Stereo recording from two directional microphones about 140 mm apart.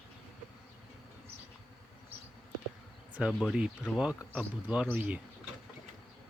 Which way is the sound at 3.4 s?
5° right (ahead or behind).